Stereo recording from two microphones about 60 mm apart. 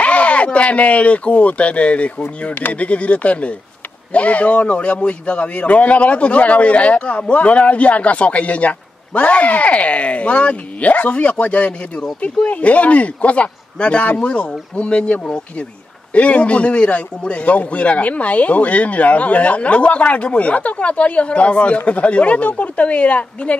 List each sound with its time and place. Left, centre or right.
0.0 s a man's voice: left